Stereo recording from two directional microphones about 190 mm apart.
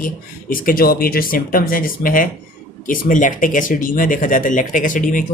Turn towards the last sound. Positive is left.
turn(degrees=45)  # may be behind; listen again after turning